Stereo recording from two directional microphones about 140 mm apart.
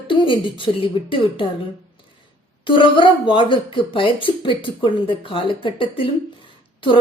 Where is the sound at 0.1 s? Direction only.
35° left (ahead or behind).